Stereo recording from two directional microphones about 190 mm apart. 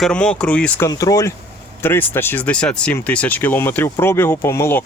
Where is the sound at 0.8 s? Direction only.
15° left (ahead or behind).